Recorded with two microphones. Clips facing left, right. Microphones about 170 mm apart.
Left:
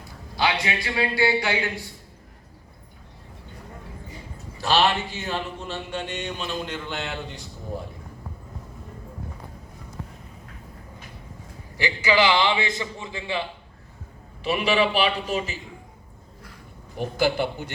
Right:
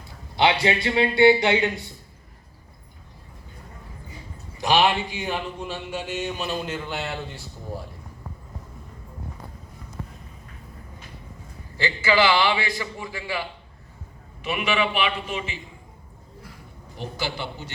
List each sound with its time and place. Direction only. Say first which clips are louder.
0.3 s a man's voice: right 4 dB; 25° right (ahead or behind)
4.5 s speech: right 1 dB; 15° right (ahead or behind)
11.8 s a man's voice: even; 15° left (ahead or behind)
14.4 s a man's voice: left 3 dB; 35° left (ahead or behind)
17.0 s speech: left 8 dB; 50° left (ahead or behind)